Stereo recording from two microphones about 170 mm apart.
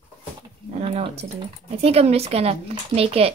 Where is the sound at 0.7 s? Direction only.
35° right (ahead or behind).